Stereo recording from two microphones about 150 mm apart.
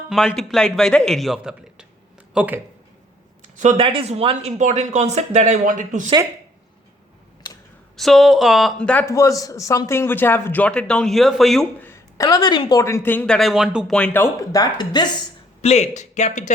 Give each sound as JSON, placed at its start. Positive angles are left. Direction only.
{"t": 0.3, "sound": "a man's voice", "side_deg": 5}
{"t": 3.5, "sound": "speech", "side_deg": -55}
{"t": 3.8, "sound": "speech", "side_deg": -40}
{"t": 7.9, "sound": "a man's voice", "side_deg": 0}
{"t": 9.0, "sound": "speech", "side_deg": 20}
{"t": 11.8, "sound": "speech", "side_deg": 15}
{"t": 13.9, "sound": "speech", "side_deg": 10}
{"t": 15.6, "sound": "speech", "side_deg": 45}